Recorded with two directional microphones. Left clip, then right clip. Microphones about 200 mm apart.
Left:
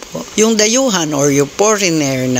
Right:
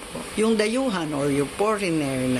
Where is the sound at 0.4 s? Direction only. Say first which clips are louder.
Left 10 dB; 40° left (ahead or behind).